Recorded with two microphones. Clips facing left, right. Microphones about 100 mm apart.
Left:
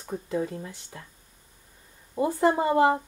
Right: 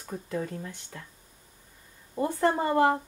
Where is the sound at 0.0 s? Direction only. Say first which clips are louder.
Left 4 dB; 15° left (ahead or behind).